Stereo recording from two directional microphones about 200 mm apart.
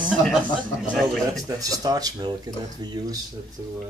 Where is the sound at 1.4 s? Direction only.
15° right (ahead or behind).